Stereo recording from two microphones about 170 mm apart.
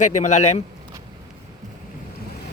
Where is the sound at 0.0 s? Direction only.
45° left (ahead or behind).